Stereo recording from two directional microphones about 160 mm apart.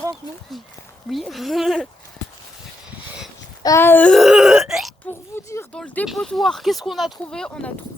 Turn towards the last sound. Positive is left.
turn(degrees=5)  # may be behind; listen again after turning